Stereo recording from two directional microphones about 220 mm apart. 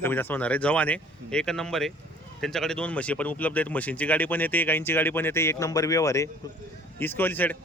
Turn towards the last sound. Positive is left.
turn(degrees=10)  # may be behind; listen again after turning